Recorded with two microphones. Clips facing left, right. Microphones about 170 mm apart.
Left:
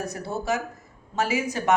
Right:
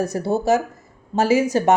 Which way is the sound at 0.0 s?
35° right (ahead or behind).